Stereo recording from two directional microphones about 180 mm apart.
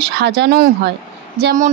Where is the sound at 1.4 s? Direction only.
45° right (ahead or behind).